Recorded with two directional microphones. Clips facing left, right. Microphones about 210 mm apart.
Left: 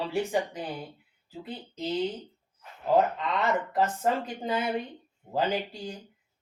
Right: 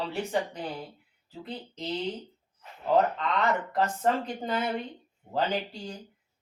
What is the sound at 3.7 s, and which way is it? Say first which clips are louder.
Speech: even; 10° left (ahead or behind).